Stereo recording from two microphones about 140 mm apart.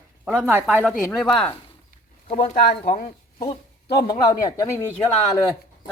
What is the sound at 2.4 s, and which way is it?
Speech, 90° left.